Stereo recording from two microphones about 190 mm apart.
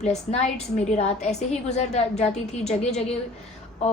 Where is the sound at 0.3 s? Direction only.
35° left (ahead or behind).